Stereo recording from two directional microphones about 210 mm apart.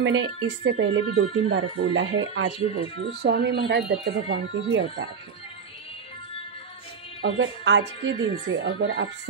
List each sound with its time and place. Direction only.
0.0 s a woman's voice: 60° right (ahead or behind)
3.2 s speech: 50° right (ahead or behind)
7.2 s a woman's voice: 60° right (ahead or behind)